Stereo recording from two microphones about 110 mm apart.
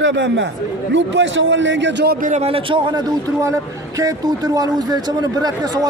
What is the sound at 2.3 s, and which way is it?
A man's voice, 65° right (ahead or behind).